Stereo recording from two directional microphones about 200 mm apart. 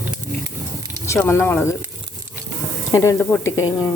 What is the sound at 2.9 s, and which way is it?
Speech, 15° left (ahead or behind).